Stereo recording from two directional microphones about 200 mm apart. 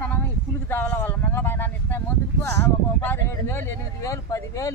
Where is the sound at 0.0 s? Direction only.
10° left (ahead or behind).